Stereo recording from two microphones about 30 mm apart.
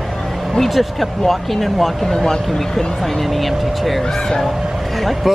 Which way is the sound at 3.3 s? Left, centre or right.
Centre.